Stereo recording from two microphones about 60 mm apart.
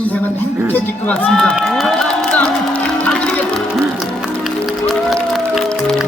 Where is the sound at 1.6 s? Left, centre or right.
Centre.